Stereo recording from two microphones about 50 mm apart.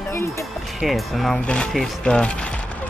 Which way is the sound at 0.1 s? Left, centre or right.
Left.